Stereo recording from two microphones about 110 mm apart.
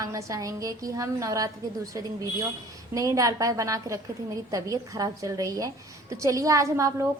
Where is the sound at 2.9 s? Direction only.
30° right (ahead or behind).